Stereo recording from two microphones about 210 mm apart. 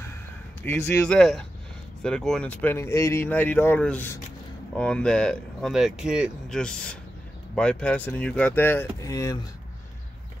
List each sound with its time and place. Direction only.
0.6 s speech: 10° left (ahead or behind)